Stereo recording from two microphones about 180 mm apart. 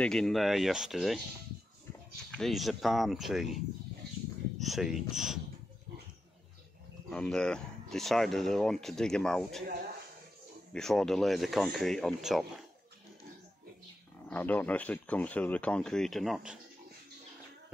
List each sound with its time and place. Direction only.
0.0 s speech: 5° left (ahead or behind)
2.3 s speech: centre (ahead or behind)
4.6 s speech: centre (ahead or behind)
7.1 s speech: 5° left (ahead or behind)
10.7 s speech: 5° left (ahead or behind)
14.3 s speech: 10° left (ahead or behind)